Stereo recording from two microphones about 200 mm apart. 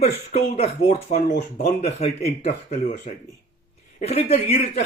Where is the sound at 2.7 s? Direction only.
40° left (ahead or behind).